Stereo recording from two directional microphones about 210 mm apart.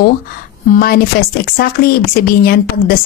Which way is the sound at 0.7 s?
45° left (ahead or behind).